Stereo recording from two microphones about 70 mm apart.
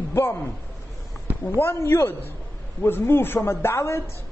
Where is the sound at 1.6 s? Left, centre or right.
Left.